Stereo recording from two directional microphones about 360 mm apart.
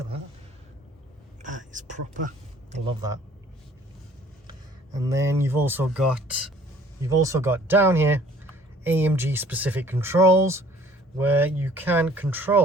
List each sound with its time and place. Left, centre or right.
1.4 s a sound: right
2.7 s speech: centre
4.9 s speech: centre